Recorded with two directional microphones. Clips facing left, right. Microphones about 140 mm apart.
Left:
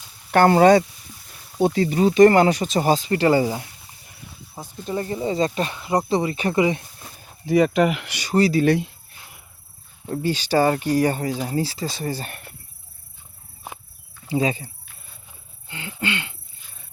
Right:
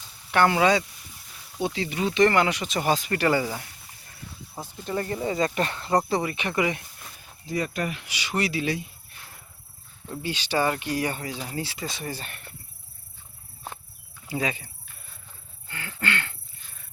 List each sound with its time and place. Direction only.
0.3 s speech: 45° left (ahead or behind); by 3.7 s 25° left (ahead or behind)
4.9 s speech: 20° left (ahead or behind)
6.3 s speech: 40° left (ahead or behind)
6.6 s a sound: 25° left (ahead or behind)
7.4 s speech: 90° left
8.1 s speech: 40° left (ahead or behind)
8.6 s speech: 60° left (ahead or behind)
10.1 s speech: 40° left (ahead or behind)
14.3 s speech: 30° left (ahead or behind)
15.6 s a sound: 20° left (ahead or behind)